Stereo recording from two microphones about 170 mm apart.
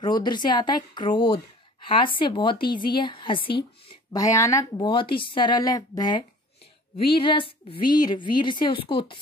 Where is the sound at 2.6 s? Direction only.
60° left (ahead or behind).